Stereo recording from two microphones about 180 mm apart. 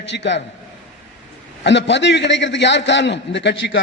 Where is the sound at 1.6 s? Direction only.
75° left (ahead or behind).